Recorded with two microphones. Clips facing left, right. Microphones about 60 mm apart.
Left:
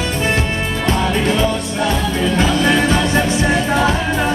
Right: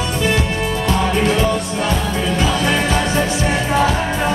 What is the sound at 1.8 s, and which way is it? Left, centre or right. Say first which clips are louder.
Music: left 2 dB; left.